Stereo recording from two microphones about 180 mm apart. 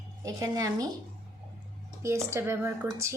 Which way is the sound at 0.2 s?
20° right (ahead or behind).